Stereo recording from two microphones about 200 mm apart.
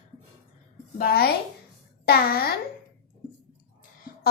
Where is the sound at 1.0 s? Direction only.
50° left (ahead or behind).